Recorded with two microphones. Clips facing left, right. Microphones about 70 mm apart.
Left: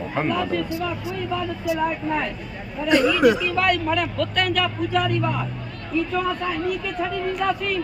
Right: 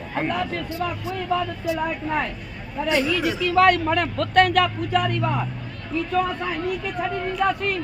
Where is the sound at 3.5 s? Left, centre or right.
Right.